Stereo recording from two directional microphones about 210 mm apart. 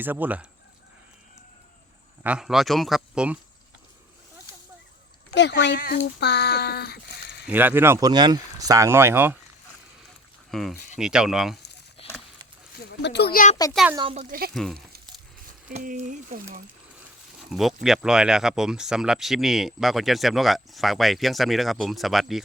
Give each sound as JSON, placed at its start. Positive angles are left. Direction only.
{"t": 0.0, "sound": "speech", "side_deg": -10}
{"t": 2.2, "sound": "speech", "side_deg": -5}
{"t": 5.3, "sound": "speech", "side_deg": 55}
{"t": 7.4, "sound": "speech", "side_deg": -10}
{"t": 10.5, "sound": "speech", "side_deg": 0}
{"t": 12.0, "sound": "a sound", "side_deg": 25}
{"t": 12.8, "sound": "speech", "side_deg": 50}
{"t": 13.9, "sound": "speech", "side_deg": -25}
{"t": 14.3, "sound": "speech", "side_deg": -45}
{"t": 14.5, "sound": "speech", "side_deg": 0}
{"t": 15.7, "sound": "speech", "side_deg": -40}
{"t": 17.5, "sound": "speech", "side_deg": 0}